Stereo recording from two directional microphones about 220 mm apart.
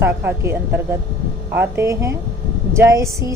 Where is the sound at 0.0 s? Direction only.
10° right (ahead or behind).